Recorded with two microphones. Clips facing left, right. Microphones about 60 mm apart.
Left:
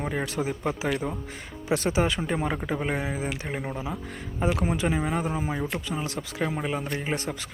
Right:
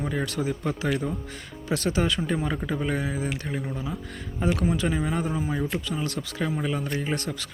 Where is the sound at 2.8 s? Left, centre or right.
Left.